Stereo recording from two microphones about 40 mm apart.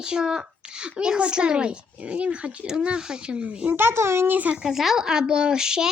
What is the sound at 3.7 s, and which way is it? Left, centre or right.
Speech, right.